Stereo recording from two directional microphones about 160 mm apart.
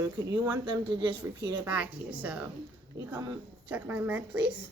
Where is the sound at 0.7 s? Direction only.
30° right (ahead or behind).